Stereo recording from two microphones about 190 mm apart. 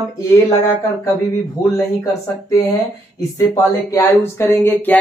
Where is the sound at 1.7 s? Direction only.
15° left (ahead or behind).